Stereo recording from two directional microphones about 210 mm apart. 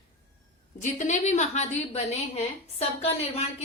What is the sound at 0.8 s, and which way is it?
A woman's voice, 35° left (ahead or behind).